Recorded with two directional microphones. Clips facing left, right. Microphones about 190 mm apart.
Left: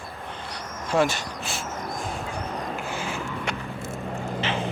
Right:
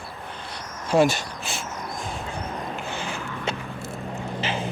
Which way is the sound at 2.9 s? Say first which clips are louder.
Left 1 dB; 5° left (ahead or behind).